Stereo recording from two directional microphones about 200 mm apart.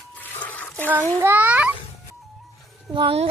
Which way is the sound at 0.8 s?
10° right (ahead or behind).